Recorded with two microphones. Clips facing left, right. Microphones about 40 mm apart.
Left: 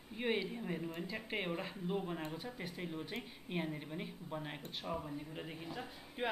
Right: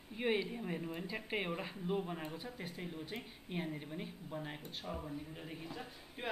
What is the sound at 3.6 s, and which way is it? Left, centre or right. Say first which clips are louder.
Speech: left 1 dB; centre.